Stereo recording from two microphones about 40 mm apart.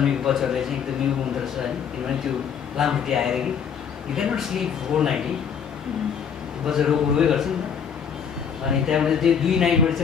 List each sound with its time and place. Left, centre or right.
0.0 s speech: centre
2.8 s speech: centre
6.7 s speech: centre
8.6 s speech: centre